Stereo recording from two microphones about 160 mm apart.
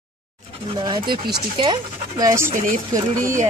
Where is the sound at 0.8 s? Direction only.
30° right (ahead or behind).